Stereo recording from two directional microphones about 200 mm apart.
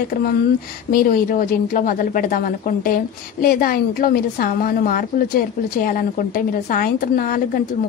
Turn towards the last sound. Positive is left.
turn(degrees=45)  # may be behind; listen again after turning